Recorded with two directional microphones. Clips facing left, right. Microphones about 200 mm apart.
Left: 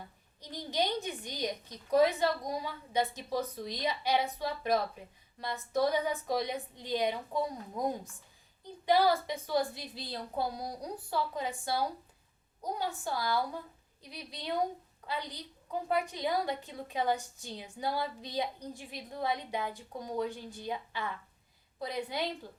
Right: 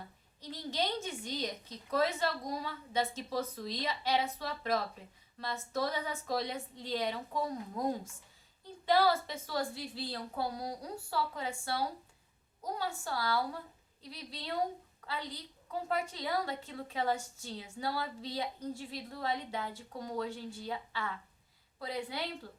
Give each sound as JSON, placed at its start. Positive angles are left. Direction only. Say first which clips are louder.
{"t": 0.5, "sound": "a woman's voice", "louder": "left 3 dB", "side_deg": 15}
{"t": 8.6, "sound": "a woman's voice", "louder": "left 2 dB", "side_deg": 15}